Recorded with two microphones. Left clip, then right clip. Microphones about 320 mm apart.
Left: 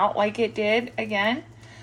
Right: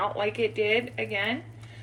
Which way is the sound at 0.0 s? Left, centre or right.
Left.